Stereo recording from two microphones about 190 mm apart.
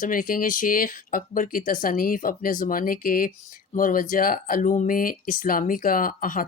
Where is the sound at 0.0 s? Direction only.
45° left (ahead or behind).